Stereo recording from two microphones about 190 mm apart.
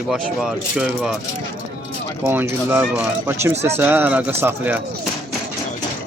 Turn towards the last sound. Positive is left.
turn(degrees=-10)  # may be behind; listen again after turning